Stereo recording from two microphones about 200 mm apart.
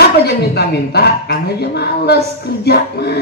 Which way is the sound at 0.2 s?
55° left (ahead or behind).